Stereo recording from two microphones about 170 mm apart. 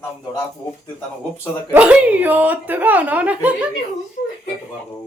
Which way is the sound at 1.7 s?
10° right (ahead or behind).